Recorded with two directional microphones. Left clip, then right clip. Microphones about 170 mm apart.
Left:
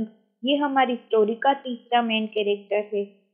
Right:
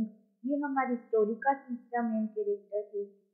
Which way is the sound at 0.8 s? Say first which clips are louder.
Left 7 dB; 30° left (ahead or behind).